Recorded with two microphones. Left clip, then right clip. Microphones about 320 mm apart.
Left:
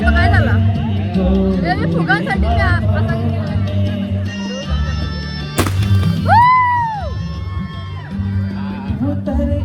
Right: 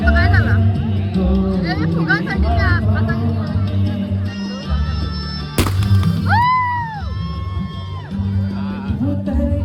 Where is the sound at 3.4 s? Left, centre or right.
Right.